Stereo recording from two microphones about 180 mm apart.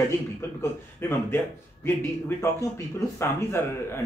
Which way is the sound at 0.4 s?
15° left (ahead or behind).